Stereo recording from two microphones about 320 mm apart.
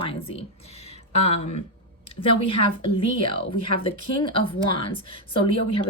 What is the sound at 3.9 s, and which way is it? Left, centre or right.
Speech, centre.